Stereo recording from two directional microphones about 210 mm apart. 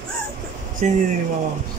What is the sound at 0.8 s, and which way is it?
Speech, 35° right (ahead or behind).